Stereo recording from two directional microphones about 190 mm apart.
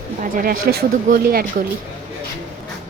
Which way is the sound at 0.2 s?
50° right (ahead or behind).